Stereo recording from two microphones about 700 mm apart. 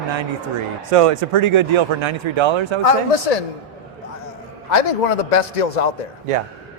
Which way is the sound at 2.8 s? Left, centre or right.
Left.